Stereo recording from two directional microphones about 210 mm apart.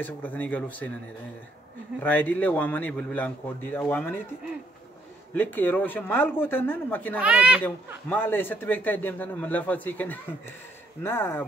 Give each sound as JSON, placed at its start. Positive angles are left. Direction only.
{"t": 0.0, "sound": "a man's voice", "side_deg": 10}
{"t": 2.0, "sound": "a man's voice", "side_deg": 10}
{"t": 5.3, "sound": "a man's voice", "side_deg": 10}
{"t": 7.2, "sound": "speech", "side_deg": -5}
{"t": 7.6, "sound": "a man's voice", "side_deg": 10}